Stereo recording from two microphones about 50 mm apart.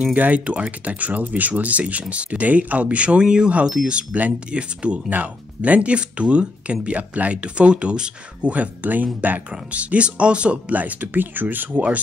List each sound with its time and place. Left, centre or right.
0.0 s speech: right